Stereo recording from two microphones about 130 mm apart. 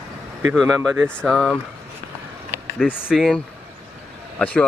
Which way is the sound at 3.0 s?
Centre (ahead or behind).